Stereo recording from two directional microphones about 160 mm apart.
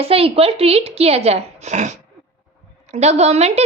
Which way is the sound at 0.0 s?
35° right (ahead or behind).